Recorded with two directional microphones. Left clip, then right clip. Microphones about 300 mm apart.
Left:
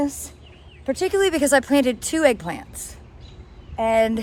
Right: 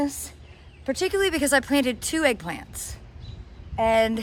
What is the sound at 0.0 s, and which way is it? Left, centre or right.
A woman's voice, centre.